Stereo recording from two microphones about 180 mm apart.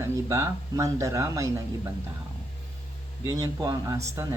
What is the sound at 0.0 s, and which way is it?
Speech, 15° right (ahead or behind).